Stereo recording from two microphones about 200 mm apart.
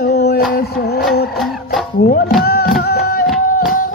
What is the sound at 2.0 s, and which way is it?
Speech, 50° left (ahead or behind).